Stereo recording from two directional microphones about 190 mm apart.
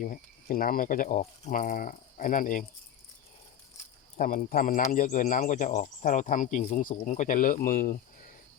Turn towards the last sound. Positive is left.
turn(degrees=45)  # may be behind; listen again after turning